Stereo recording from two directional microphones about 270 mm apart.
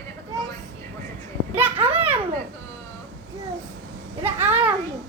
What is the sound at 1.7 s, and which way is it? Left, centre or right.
Children playing, centre.